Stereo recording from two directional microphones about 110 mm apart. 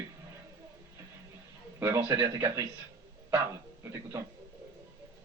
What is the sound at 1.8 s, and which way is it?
Speech, 25° right (ahead or behind).